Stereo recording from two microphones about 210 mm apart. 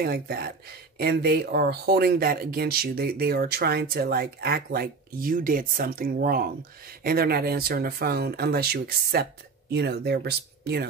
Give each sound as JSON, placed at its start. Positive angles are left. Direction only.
{"t": 0.0, "sound": "speech", "side_deg": -45}